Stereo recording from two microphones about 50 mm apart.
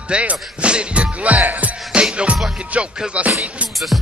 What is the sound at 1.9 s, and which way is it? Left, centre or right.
Music, right.